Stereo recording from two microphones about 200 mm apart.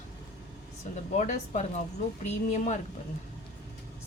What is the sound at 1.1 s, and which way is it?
Speech, 35° left (ahead or behind).